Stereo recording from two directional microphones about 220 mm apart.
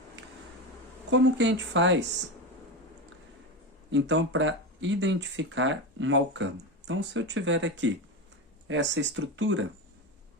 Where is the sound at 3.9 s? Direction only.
55° right (ahead or behind).